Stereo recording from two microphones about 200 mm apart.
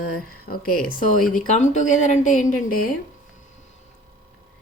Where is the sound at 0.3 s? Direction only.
45° left (ahead or behind).